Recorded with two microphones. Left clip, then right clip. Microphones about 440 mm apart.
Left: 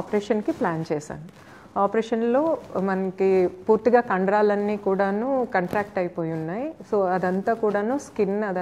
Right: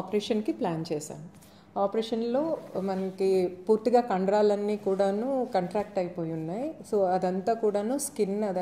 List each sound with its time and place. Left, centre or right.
0.1 s speech: centre